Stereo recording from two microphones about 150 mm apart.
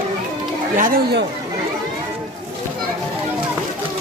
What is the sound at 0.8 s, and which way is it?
Speech, 70° right (ahead or behind).